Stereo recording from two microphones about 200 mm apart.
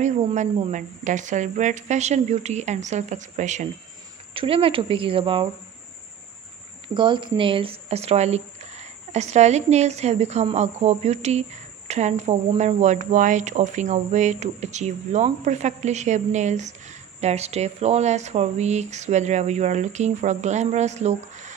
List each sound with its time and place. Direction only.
0.0 s speech: 35° right (ahead or behind)
6.9 s speech: 25° right (ahead or behind)